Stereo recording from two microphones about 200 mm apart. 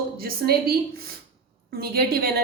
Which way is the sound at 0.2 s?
50° right (ahead or behind).